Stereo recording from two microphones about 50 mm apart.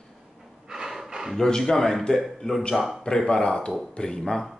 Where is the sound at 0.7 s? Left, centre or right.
Centre.